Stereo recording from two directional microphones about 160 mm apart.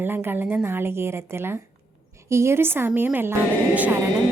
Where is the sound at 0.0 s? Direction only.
15° right (ahead or behind).